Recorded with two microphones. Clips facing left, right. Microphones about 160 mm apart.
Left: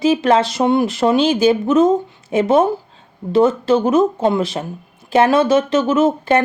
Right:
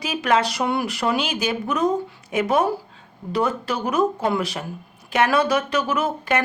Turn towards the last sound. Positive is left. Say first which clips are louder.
# left 8 dB
turn(degrees=25)  # may be behind; listen again after turning